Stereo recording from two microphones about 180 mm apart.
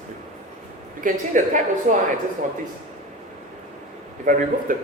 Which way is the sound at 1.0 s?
45° right (ahead or behind).